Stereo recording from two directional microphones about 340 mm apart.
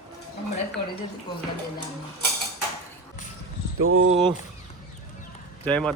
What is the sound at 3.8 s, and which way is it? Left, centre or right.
Speech, right.